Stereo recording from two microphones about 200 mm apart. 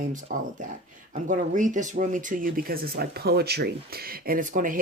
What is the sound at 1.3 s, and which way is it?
Speech, 40° right (ahead or behind).